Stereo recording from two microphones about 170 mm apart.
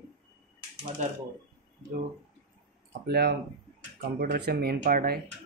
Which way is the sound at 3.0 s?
70° right (ahead or behind).